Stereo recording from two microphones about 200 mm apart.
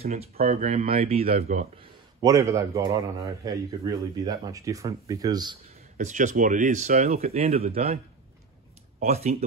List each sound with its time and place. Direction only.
0.0 s speech: 30° right (ahead or behind)
2.2 s a man's voice: 15° right (ahead or behind)
5.9 s speech: 40° right (ahead or behind)
9.0 s speech: 35° right (ahead or behind)